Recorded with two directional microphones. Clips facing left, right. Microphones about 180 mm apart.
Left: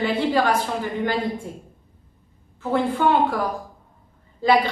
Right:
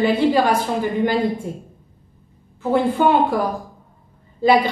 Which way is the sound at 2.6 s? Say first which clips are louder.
Right 4 dB; 15° right (ahead or behind).